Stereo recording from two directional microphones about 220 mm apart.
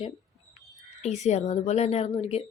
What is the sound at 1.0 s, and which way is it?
Speech, 30° left (ahead or behind).